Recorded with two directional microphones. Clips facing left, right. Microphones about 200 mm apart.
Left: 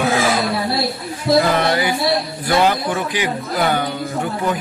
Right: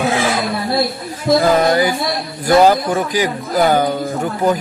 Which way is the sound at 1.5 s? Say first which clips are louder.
Right 4 dB; 45° right (ahead or behind).